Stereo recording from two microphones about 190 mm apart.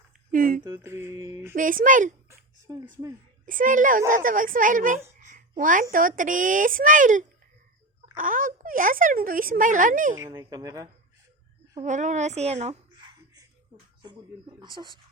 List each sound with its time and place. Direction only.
0.3 s speech: 45° right (ahead or behind)
0.6 s mantra: 15° right (ahead or behind)
1.5 s speech: 45° right (ahead or behind)
2.6 s speech: 20° right (ahead or behind)
3.4 s speech: 45° right (ahead or behind)
5.2 s a sound: 45° right (ahead or behind)
5.9 s speech: 45° right (ahead or behind)
10.2 s mantra: 15° right (ahead or behind)
11.8 s a woman's voice: 40° right (ahead or behind)
12.9 s a sound: 25° right (ahead or behind)
14.6 s speech: 25° right (ahead or behind)